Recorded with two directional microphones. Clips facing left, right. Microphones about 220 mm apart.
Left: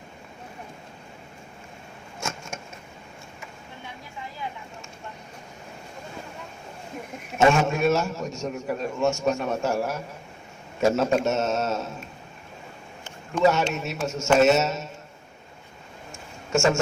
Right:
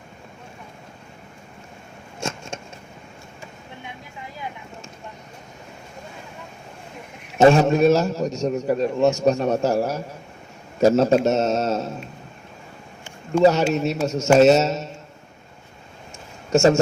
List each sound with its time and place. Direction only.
7.3 s a man's voice: 35° right (ahead or behind)
13.4 s a man's voice: 35° right (ahead or behind)
16.5 s speech: 35° right (ahead or behind)